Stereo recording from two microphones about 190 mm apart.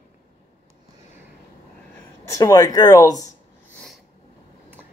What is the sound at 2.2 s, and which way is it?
Speech, 20° left (ahead or behind).